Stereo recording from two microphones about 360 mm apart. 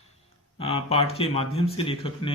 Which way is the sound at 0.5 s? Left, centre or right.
Centre.